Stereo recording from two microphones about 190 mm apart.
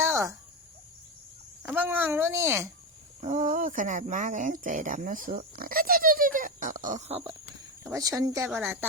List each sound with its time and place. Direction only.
0.0 s cricket: 15° right (ahead or behind)
1.6 s a sound: 10° right (ahead or behind)
3.2 s speech: 40° right (ahead or behind)
7.9 s speech: 15° right (ahead or behind)